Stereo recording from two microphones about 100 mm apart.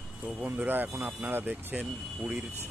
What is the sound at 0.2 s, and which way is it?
Speech, 15° right (ahead or behind).